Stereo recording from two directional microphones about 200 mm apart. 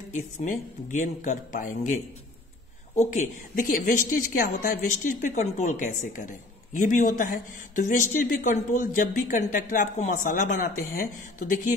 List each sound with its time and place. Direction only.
0.1 s a woman's voice: 40° left (ahead or behind)
3.0 s a woman's voice: 40° left (ahead or behind)